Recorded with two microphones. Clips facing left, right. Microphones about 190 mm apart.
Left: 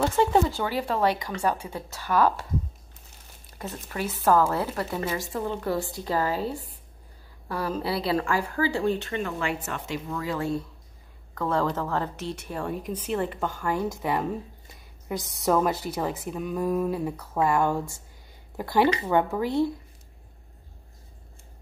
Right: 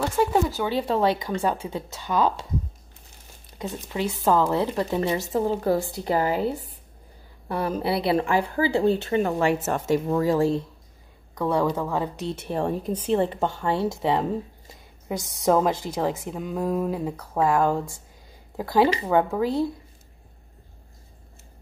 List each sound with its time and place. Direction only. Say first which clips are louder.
0.1 s speech: even; 5° right (ahead or behind)
0.7 s speech: right 3 dB; 25° right (ahead or behind)
3.9 s speech: even; 15° right (ahead or behind)
11.3 s speech: right 3 dB; 15° right (ahead or behind)
12.4 s speech: right 8 dB; 30° right (ahead or behind)
19.0 s speech: right 2 dB; 5° right (ahead or behind)